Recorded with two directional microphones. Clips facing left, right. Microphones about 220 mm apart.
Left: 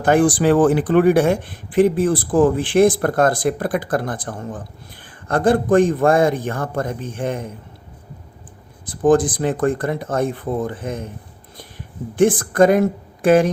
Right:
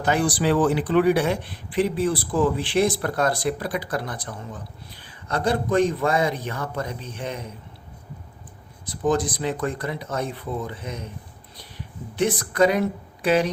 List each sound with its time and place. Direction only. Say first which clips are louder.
0.0 s speech: left 7 dB; 50° left (ahead or behind)
8.9 s speech: left 8 dB; 50° left (ahead or behind)
12.1 s speech: left 7 dB; 50° left (ahead or behind)